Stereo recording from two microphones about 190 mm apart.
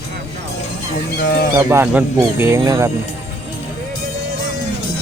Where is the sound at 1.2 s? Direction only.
45° left (ahead or behind).